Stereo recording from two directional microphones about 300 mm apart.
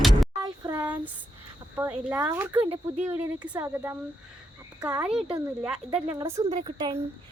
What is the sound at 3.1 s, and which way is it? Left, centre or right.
A woman's voice, centre.